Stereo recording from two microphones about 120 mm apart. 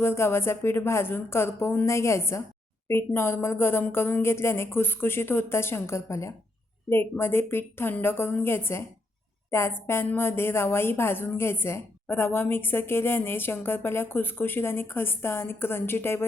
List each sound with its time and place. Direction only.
0.0 s a woman's voice: 20° left (ahead or behind)